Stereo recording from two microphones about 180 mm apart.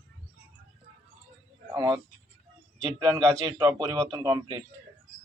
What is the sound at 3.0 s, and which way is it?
A man's voice, 20° right (ahead or behind).